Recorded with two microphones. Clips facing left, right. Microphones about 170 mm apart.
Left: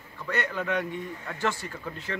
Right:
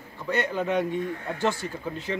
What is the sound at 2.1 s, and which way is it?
Speech, 20° right (ahead or behind).